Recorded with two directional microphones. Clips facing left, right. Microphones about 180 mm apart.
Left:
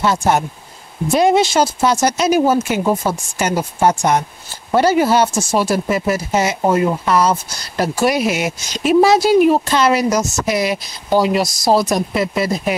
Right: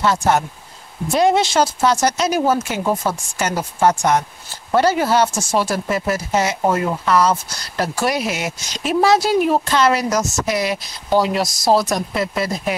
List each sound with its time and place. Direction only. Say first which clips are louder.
0.0 s speech: left 1 dB; 15° left (ahead or behind)
11.8 s speech: left 3 dB; 15° left (ahead or behind)